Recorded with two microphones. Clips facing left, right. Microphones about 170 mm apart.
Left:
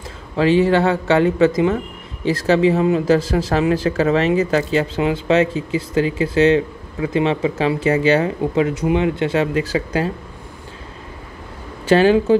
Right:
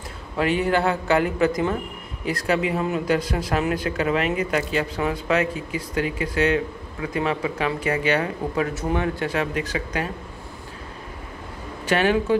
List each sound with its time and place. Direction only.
0.4 s speech: 25° left (ahead or behind)
11.8 s speech: 30° left (ahead or behind)